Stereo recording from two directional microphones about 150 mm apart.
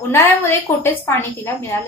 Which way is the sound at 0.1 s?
15° left (ahead or behind).